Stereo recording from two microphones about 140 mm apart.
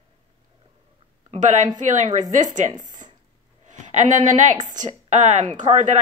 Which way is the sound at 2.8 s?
65° right (ahead or behind).